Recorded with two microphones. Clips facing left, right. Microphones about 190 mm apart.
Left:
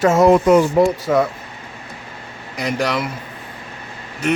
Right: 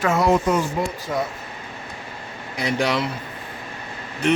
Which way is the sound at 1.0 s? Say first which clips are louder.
Left 8 dB; 70° left (ahead or behind).